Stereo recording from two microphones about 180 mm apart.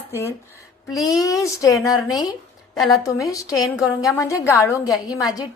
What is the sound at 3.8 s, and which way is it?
Speech, 5° right (ahead or behind).